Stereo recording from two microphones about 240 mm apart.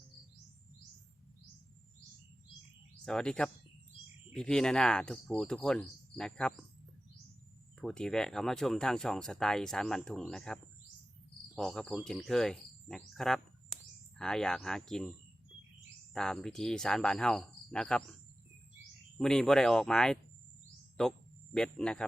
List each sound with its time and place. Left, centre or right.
3.0 s speech: centre
7.8 s speech: centre
16.1 s speech: centre
19.2 s speech: centre